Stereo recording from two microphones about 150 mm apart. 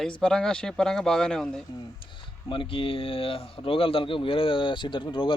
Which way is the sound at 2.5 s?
35° left (ahead or behind).